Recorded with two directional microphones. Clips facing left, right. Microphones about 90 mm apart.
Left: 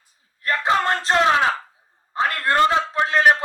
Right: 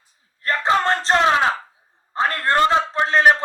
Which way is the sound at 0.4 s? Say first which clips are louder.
Right 1 dB; 30° right (ahead or behind).